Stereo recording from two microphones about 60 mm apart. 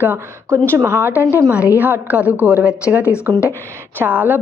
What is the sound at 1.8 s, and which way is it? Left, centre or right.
Speech, right.